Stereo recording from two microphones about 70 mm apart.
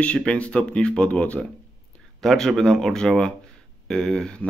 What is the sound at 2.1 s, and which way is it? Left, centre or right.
Speech, centre.